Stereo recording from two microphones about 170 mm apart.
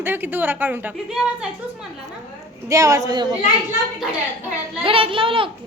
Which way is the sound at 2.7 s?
20° right (ahead or behind).